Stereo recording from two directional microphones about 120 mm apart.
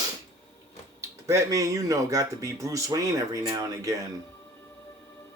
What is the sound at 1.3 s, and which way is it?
Speech, 25° right (ahead or behind).